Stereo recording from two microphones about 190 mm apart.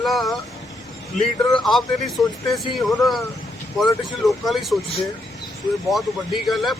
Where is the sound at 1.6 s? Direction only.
Centre (ahead or behind).